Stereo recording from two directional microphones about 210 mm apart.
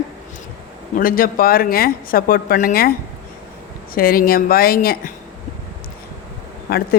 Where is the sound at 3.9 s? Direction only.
45° left (ahead or behind).